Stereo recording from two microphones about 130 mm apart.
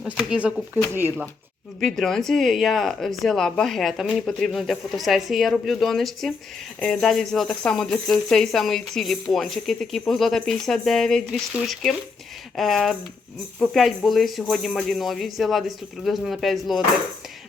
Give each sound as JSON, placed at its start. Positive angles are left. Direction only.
{"t": 0.0, "sound": "speech", "side_deg": -5}
{"t": 1.8, "sound": "speech", "side_deg": 5}